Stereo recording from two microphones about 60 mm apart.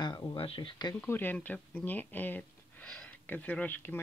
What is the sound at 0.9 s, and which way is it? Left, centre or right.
Speech, left.